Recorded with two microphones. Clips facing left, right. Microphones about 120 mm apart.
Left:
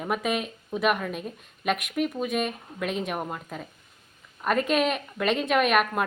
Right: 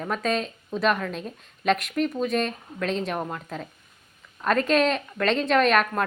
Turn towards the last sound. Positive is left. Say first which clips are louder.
# right 2 dB
turn(degrees=10)  # may be behind; listen again after turning